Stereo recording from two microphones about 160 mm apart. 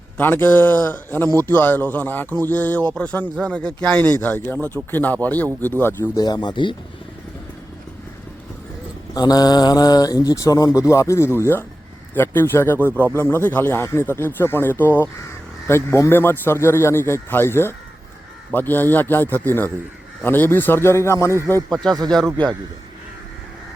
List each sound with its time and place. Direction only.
0.2 s speech: 10° left (ahead or behind)
6.2 s speech: 25° left (ahead or behind)
9.1 s speech: 25° left (ahead or behind)